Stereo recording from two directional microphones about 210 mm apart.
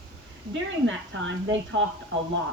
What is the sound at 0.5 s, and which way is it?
A woman's voice, 65° right (ahead or behind).